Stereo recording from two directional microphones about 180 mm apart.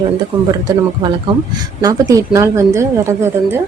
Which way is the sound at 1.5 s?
20° right (ahead or behind).